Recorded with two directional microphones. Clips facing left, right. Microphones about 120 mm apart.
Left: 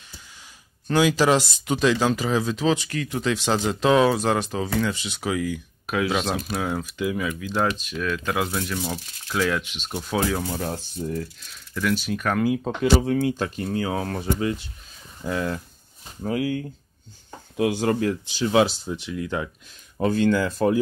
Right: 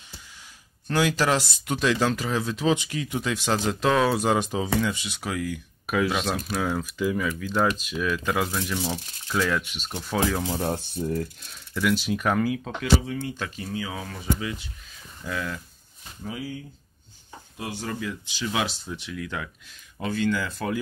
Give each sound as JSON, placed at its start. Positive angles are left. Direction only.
{"t": 0.8, "sound": "speech", "side_deg": 5}
{"t": 2.7, "sound": "speech", "side_deg": -15}
{"t": 4.2, "sound": "speech", "side_deg": -10}
{"t": 7.9, "sound": "speech", "side_deg": -10}
{"t": 10.4, "sound": "speech", "side_deg": -20}
{"t": 12.4, "sound": "speech", "side_deg": 25}
{"t": 13.0, "sound": "speech", "side_deg": 55}
{"t": 15.2, "sound": "speech", "side_deg": 30}
{"t": 16.3, "sound": "speech", "side_deg": 70}
{"t": 17.6, "sound": "speech", "side_deg": 80}
{"t": 18.3, "sound": "speech", "side_deg": 35}